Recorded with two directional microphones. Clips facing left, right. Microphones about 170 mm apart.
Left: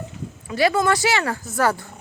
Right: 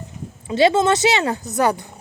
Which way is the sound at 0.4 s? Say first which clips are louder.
Right 4 dB; 25° right (ahead or behind).